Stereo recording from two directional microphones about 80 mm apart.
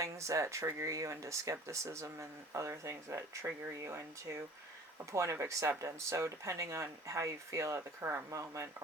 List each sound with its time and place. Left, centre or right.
0.0 s speech: right
5.1 s speech: right